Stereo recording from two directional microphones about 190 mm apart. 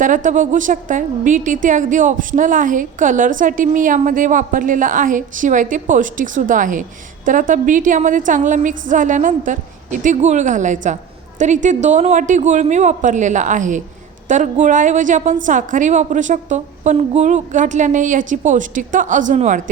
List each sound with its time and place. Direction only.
0.0 s a woman's voice: 45° right (ahead or behind)